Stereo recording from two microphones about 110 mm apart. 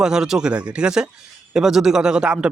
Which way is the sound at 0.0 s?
5° right (ahead or behind).